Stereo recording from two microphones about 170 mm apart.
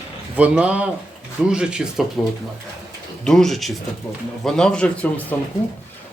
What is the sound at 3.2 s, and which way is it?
Speech, centre (ahead or behind).